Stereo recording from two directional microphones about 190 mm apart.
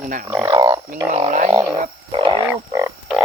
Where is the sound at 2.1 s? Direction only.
30° right (ahead or behind).